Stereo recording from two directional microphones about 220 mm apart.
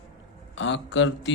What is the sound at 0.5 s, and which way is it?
Speech, 55° left (ahead or behind).